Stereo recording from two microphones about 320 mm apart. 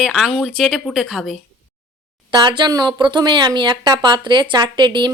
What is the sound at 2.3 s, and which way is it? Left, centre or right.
A woman's voice, centre.